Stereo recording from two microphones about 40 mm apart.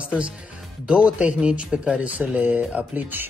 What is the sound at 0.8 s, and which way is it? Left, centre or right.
Speech, right.